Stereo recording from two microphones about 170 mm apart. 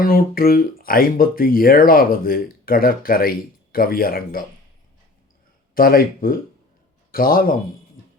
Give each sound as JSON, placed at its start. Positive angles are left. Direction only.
{"t": 0.0, "sound": "speech", "side_deg": 60}
{"t": 5.7, "sound": "a man's voice", "side_deg": 55}